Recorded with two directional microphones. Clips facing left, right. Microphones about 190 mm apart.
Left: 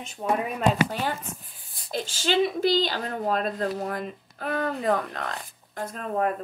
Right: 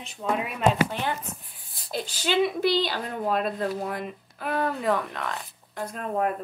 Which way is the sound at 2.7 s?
45° left (ahead or behind).